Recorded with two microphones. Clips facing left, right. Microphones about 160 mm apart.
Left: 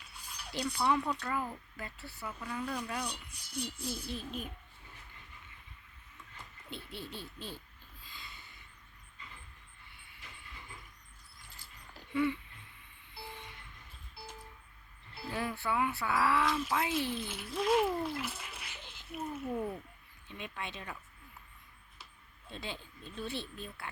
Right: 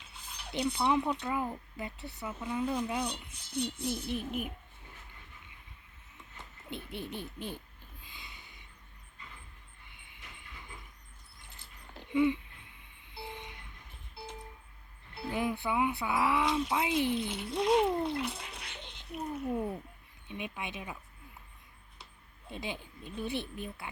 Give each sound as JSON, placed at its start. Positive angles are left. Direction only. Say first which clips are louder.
{"t": 0.4, "sound": "speech", "louder": "right 2 dB", "side_deg": -25}
{"t": 3.2, "sound": "speech", "louder": "right 5 dB", "side_deg": 10}
{"t": 4.1, "sound": "speech", "louder": "right 5 dB", "side_deg": -15}
{"t": 6.3, "sound": "speech", "louder": "right 4 dB", "side_deg": -20}
{"t": 8.0, "sound": "a sound", "louder": "left 1 dB", "side_deg": -15}
{"t": 9.9, "sound": "vehicle", "louder": "right 1 dB", "side_deg": -20}
{"t": 11.9, "sound": "a sound", "louder": "right 4 dB", "side_deg": -15}
{"t": 13.1, "sound": "vehicle", "louder": "right 4 dB", "side_deg": -15}
{"t": 15.1, "sound": "speech", "louder": "right 4 dB", "side_deg": -20}
{"t": 18.4, "sound": "a sound", "louder": "right 2 dB", "side_deg": 5}
{"t": 19.5, "sound": "speech", "louder": "right 2 dB", "side_deg": -15}
{"t": 22.4, "sound": "speech", "louder": "right 3 dB", "side_deg": -15}